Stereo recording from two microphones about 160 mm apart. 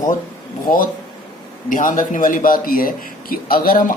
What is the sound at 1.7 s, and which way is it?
A man's voice, 55° left (ahead or behind).